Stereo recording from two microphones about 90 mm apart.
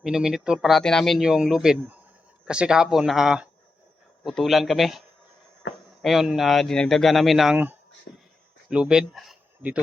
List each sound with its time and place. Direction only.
0.0 s speech: 5° right (ahead or behind)
0.7 s speech: 5° left (ahead or behind)
1.2 s speech: 5° right (ahead or behind)
7.5 s speech: 20° right (ahead or behind); by 9.4 s 5° right (ahead or behind)